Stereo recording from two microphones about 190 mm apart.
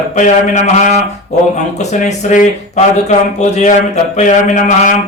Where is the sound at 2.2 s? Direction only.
40° left (ahead or behind).